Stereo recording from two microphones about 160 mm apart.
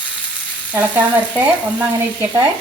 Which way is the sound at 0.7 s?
10° right (ahead or behind).